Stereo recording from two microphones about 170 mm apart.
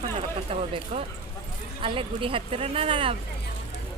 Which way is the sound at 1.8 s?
30° right (ahead or behind).